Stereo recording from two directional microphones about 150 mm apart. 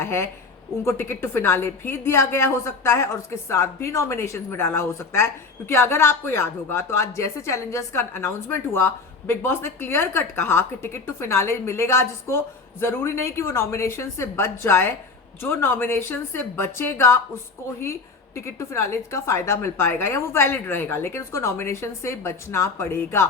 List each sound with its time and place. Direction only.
0.0 s a woman's voice: 15° left (ahead or behind)
18.3 s a woman's voice: 20° left (ahead or behind)